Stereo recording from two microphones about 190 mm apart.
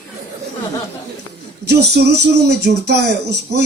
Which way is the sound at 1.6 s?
60° right (ahead or behind).